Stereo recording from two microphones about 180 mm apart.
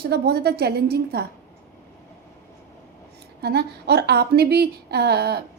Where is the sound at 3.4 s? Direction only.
65° right (ahead or behind).